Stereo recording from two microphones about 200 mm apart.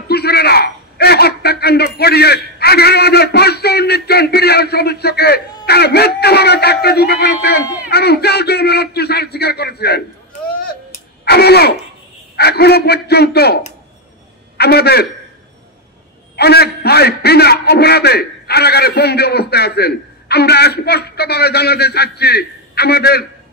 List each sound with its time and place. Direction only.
0.1 s a sound: 55° left (ahead or behind)
2.0 s a man's voice: 55° left (ahead or behind)
11.2 s a man's voice: 55° left (ahead or behind)
14.6 s a man's voice: 55° left (ahead or behind)
16.3 s a man's voice: 55° left (ahead or behind)